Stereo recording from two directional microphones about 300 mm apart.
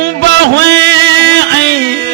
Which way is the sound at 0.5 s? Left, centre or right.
Right.